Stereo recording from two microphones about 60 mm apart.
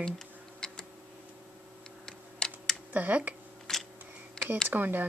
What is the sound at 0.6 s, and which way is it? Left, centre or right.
Tick, centre.